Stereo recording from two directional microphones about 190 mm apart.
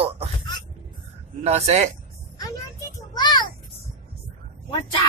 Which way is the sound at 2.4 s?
20° left (ahead or behind).